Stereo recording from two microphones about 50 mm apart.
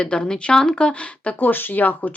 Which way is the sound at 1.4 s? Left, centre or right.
Left.